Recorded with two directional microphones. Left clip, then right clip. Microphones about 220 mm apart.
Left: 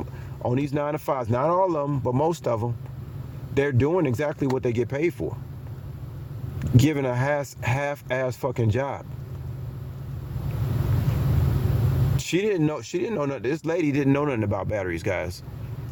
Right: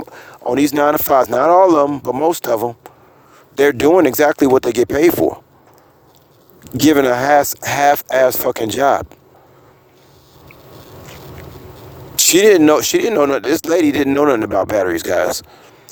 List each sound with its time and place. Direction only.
0.5 s speech: 50° right (ahead or behind)
6.8 s speech: 45° right (ahead or behind)
12.1 s speech: 50° right (ahead or behind)